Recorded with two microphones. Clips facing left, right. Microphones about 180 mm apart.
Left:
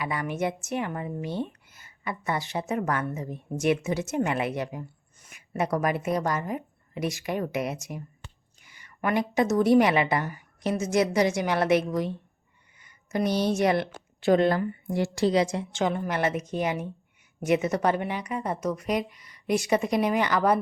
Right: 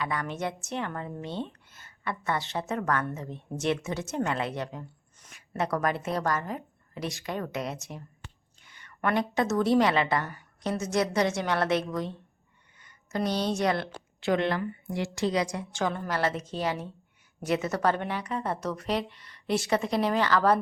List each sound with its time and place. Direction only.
0.0 s a woman's voice: 10° left (ahead or behind)
9.3 s a woman's voice: 15° left (ahead or behind)
13.5 s a woman's voice: 20° left (ahead or behind)
14.2 s a woman's voice: 35° left (ahead or behind); by 20.6 s 15° left (ahead or behind)